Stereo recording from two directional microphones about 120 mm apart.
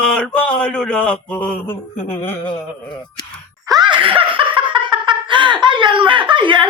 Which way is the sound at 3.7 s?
40° right (ahead or behind).